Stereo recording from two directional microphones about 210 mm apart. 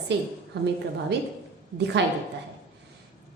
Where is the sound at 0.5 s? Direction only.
50° right (ahead or behind).